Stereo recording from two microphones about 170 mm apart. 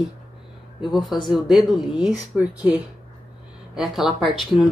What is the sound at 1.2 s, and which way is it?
Speech, centre (ahead or behind).